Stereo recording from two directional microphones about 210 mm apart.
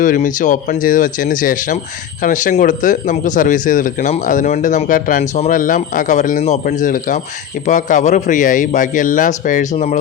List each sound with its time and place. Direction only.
0.0 s speech: 40° left (ahead or behind)